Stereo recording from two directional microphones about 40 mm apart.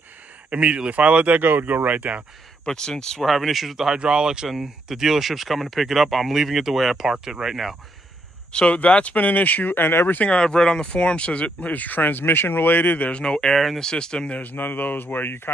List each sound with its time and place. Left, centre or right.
0.5 s speech: right
1.4 s speech: right
1.9 s speech: right
2.6 s speech: centre
3.3 s speech: centre
4.0 s speech: right
4.5 s speech: centre
8.5 s speech: left
8.7 s speech: left
10.1 s speech: left
13.1 s speech: left
14.4 s speech: left